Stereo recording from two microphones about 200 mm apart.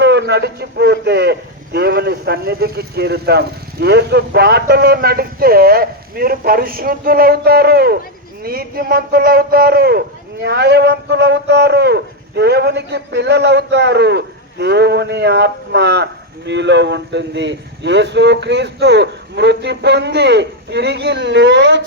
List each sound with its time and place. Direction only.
0.0 s a man's voice: 60° right (ahead or behind)